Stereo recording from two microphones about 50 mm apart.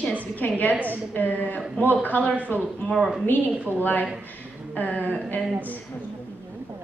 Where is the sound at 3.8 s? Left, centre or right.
Left.